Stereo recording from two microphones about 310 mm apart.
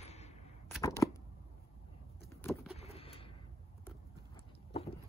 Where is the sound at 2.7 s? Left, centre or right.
Centre.